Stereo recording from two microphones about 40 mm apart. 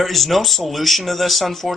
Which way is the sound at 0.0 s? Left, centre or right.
Centre.